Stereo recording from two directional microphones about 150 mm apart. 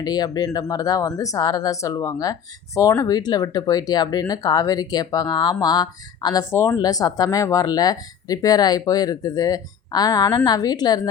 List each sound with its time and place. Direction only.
0.0 s speech: 25° left (ahead or behind)